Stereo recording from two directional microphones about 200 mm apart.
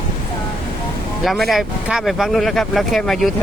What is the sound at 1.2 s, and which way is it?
Speech, centre (ahead or behind).